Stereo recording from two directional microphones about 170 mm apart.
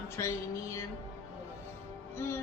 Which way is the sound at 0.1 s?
15° left (ahead or behind).